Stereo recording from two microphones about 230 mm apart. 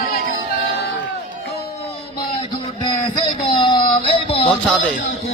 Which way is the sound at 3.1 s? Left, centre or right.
Left.